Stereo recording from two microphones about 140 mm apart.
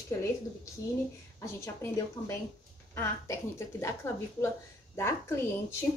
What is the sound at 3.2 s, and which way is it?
A woman's voice, 20° left (ahead or behind).